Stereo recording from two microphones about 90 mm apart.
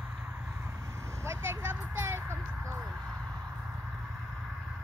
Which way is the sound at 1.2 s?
30° right (ahead or behind).